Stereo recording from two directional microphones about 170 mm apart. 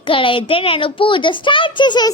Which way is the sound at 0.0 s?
30° left (ahead or behind).